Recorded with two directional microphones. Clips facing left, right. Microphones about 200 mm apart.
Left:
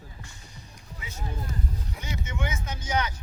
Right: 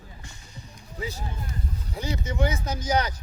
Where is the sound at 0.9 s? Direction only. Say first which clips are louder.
Right 4 dB; 35° right (ahead or behind).